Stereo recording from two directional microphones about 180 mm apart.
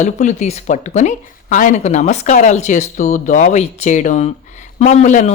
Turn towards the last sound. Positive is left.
turn(degrees=40)  # may be behind; listen again after turning